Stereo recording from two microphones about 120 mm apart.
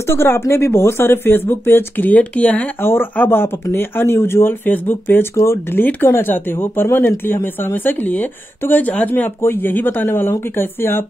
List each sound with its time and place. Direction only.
0.1 s speech: 20° left (ahead or behind)